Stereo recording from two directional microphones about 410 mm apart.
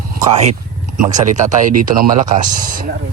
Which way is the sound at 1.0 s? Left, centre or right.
Centre.